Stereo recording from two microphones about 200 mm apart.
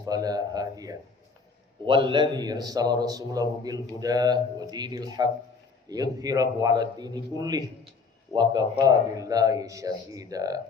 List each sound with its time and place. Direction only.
0.0 s speech: 20° right (ahead or behind)